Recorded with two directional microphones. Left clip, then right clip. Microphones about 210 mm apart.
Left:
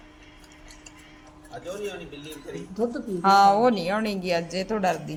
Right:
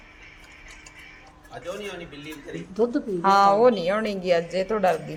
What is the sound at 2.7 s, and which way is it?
Speech, 50° right (ahead or behind).